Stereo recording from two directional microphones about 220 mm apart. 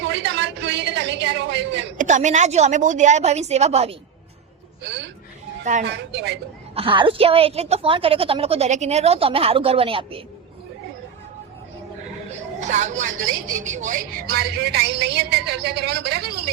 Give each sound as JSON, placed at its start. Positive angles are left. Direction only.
{"t": 0.0, "sound": "a sound", "side_deg": -50}
{"t": 2.0, "sound": "a woman's voice", "side_deg": -35}
{"t": 5.8, "sound": "a woman's voice", "side_deg": -50}
{"t": 6.7, "sound": "a woman's voice", "side_deg": -25}
{"t": 12.5, "sound": "a woman's voice", "side_deg": -35}